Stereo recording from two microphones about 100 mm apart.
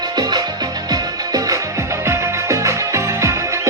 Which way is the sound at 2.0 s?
25° right (ahead or behind).